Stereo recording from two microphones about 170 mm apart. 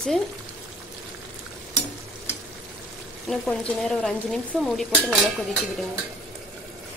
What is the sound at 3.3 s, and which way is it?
Stir, 5° left (ahead or behind).